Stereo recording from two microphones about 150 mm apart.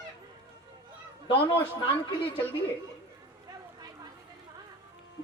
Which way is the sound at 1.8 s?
35° left (ahead or behind).